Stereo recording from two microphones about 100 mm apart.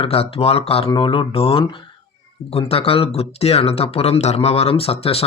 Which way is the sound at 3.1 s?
90° left.